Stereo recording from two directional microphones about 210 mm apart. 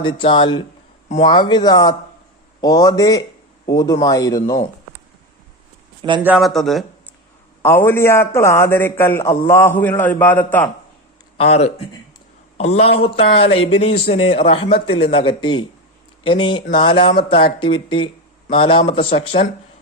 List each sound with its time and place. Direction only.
0.0 s a man's voice: 25° left (ahead or behind)
6.0 s speech: 20° right (ahead or behind)
6.2 s speech: centre (ahead or behind)
7.6 s a man's voice: 10° left (ahead or behind)
11.3 s a man's voice: 30° left (ahead or behind)